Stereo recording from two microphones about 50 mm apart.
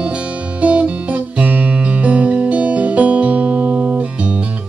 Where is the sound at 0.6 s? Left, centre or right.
Right.